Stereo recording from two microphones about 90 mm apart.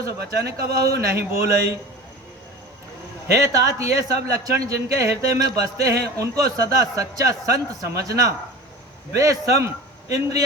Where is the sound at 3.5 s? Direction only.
40° right (ahead or behind).